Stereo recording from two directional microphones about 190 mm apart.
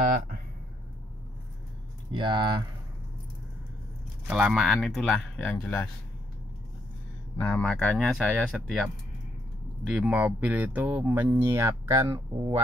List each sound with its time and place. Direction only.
0.0 s a sound: 50° right (ahead or behind)
2.1 s speech: 25° right (ahead or behind)
4.3 s speech: 5° right (ahead or behind)
7.3 s speech: 5° left (ahead or behind); by 12.5 s 20° right (ahead or behind)